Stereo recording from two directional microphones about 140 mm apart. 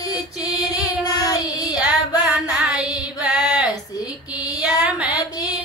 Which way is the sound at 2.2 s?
10° right (ahead or behind).